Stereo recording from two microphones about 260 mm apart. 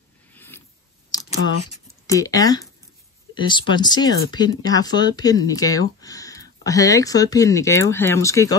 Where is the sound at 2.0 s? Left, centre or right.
Centre.